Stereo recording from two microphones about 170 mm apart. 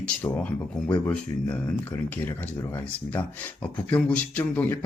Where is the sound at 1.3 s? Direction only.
20° left (ahead or behind).